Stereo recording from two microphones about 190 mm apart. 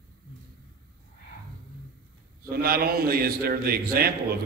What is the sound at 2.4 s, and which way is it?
A man's voice, 50° right (ahead or behind).